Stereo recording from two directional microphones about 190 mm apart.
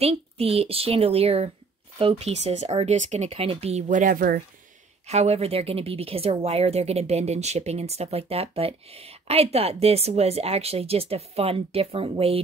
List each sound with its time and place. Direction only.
0.0 s a woman's voice: 30° right (ahead or behind); by 4.4 s 50° right (ahead or behind)
5.0 s a woman's voice: 35° right (ahead or behind)